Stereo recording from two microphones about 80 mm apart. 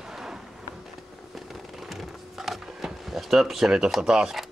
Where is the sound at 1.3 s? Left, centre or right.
Centre.